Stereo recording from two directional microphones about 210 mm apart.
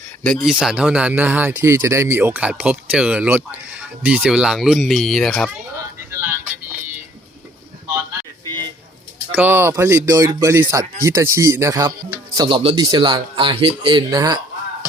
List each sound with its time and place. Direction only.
0.2 s speech: centre (ahead or behind)
9.3 s speech: 10° right (ahead or behind)